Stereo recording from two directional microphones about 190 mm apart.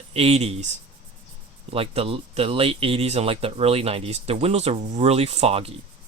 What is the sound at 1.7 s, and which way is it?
Speech, 30° right (ahead or behind).